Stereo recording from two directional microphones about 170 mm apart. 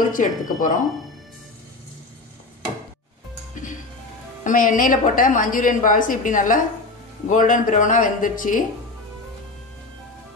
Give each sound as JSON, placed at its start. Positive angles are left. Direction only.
{"t": 0.1, "sound": "a woman's voice", "side_deg": 50}
{"t": 4.5, "sound": "a woman's voice", "side_deg": 50}